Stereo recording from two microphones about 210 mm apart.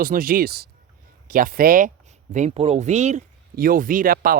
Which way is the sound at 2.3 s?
30° right (ahead or behind).